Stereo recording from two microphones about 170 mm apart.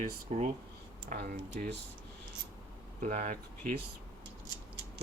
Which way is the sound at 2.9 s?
50° right (ahead or behind).